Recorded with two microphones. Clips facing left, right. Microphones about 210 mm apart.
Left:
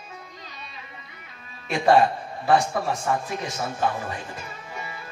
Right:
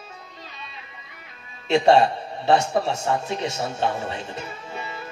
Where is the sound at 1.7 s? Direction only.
25° right (ahead or behind).